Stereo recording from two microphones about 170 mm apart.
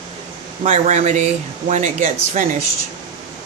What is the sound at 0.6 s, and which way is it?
Speech, 40° right (ahead or behind).